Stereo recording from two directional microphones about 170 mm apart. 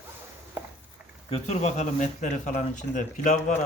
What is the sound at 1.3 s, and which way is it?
Speech, 35° left (ahead or behind).